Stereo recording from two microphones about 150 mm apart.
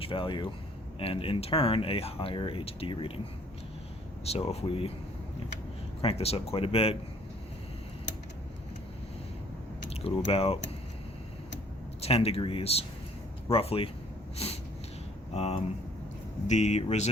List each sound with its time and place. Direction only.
0.0 s speech: 35° left (ahead or behind)
4.3 s speech: 45° left (ahead or behind)
6.0 s speech: 40° left (ahead or behind)
9.9 s speech: 40° left (ahead or behind)
11.9 s speech: 40° left (ahead or behind)
14.3 s snort: 45° left (ahead or behind)
15.3 s speech: 45° left (ahead or behind)